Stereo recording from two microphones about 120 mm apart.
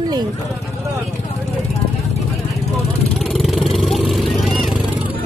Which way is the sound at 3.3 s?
Centre (ahead or behind).